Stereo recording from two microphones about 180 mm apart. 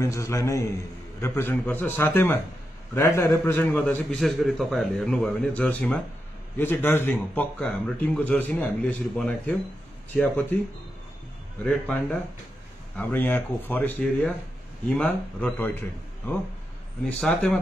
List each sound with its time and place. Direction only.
0.0 s a man's voice: 15° left (ahead or behind)
11.6 s a man's voice: 5° left (ahead or behind)
17.0 s a man's voice: 5° left (ahead or behind)